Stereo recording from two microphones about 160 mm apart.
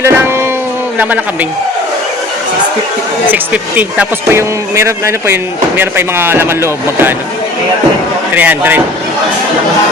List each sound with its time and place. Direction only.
0.0 s speech: 15° right (ahead or behind)
3.2 s speech: 10° right (ahead or behind)
8.4 s speech: 10° right (ahead or behind)